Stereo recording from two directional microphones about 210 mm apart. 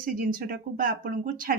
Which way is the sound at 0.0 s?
40° right (ahead or behind).